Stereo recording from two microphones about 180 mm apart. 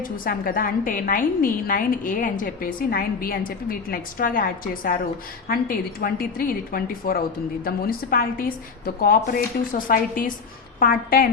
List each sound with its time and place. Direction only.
0.0 s a woman's voice: 50° left (ahead or behind)